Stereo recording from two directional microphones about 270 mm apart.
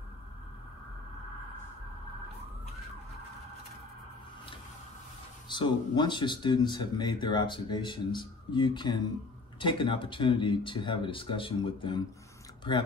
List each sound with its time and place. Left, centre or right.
5.5 s speech: centre